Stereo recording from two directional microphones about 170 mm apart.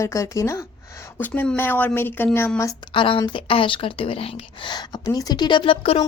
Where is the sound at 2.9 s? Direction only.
30° left (ahead or behind).